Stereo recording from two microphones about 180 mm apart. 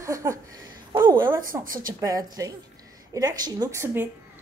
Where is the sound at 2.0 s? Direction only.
20° right (ahead or behind).